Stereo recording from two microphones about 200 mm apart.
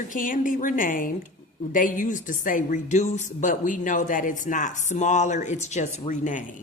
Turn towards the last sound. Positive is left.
turn(degrees=40)  # may be behind; listen again after turning